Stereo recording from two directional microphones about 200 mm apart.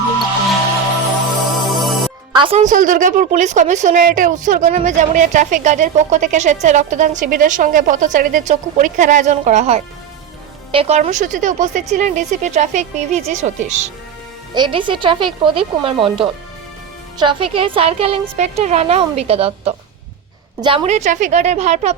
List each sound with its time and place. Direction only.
1.6 s music: centre (ahead or behind)
2.3 s a woman's voice: 25° right (ahead or behind)
14.5 s a woman's voice: 25° right (ahead or behind)